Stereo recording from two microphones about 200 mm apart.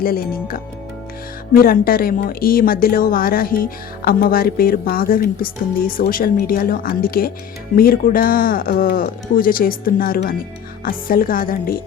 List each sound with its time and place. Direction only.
0.0 s a woman's voice: 45° left (ahead or behind)